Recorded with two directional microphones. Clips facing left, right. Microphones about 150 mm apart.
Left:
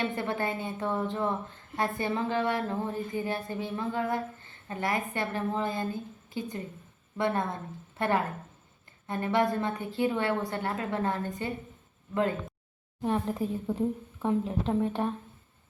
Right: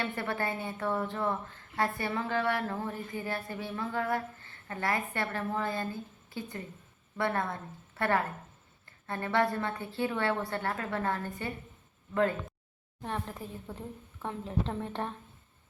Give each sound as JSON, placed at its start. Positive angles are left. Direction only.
{"t": 0.0, "sound": "a woman's voice", "side_deg": 20}
{"t": 13.0, "sound": "a woman's voice", "side_deg": 10}